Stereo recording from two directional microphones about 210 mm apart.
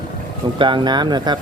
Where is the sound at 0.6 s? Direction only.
20° right (ahead or behind).